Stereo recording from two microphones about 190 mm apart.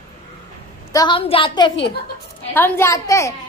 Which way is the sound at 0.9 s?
25° left (ahead or behind).